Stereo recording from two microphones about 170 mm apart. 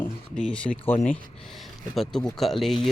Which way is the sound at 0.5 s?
5° left (ahead or behind).